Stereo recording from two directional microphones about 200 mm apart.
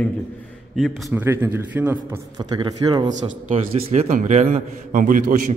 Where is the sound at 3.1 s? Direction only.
35° right (ahead or behind).